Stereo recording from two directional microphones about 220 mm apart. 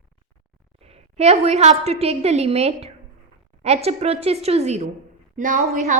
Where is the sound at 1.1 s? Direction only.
30° right (ahead or behind).